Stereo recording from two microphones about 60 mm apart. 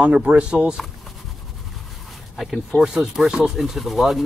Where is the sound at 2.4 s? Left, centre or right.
Centre.